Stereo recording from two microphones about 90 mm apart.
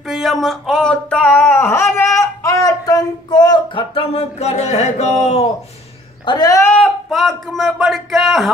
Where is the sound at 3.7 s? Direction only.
80° left.